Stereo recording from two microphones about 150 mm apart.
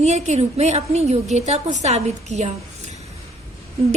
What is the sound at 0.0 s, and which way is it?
Speech, 50° right (ahead or behind).